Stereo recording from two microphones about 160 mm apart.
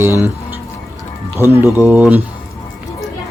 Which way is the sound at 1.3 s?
15° right (ahead or behind).